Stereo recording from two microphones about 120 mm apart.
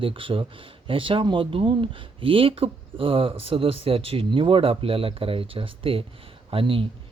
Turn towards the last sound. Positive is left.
turn(degrees=-50)  # may be behind; listen again after turning